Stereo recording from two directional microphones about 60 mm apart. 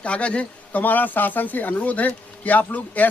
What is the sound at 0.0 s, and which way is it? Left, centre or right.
A man's voice, left.